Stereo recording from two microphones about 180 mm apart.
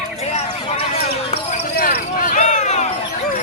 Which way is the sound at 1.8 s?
50° left (ahead or behind).